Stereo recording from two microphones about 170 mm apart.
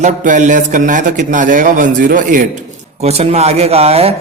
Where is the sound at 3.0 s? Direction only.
40° right (ahead or behind).